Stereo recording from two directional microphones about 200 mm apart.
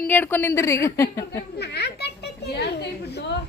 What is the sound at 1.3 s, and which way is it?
A child's voice, 55° left (ahead or behind).